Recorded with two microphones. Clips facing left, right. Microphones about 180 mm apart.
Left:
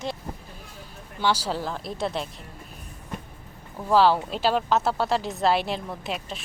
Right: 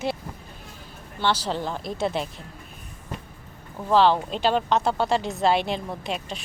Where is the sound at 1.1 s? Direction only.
10° left (ahead or behind).